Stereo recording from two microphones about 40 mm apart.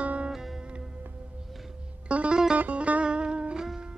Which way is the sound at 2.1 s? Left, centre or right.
Right.